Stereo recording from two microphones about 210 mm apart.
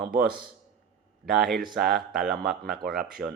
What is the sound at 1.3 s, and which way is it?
Speech, centre (ahead or behind).